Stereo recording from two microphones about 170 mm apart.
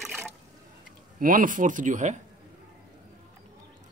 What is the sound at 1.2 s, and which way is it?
Speech, 55° right (ahead or behind).